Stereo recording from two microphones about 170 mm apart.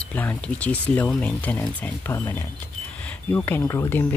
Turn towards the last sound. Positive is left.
turn(degrees=15)  # may be behind; listen again after turning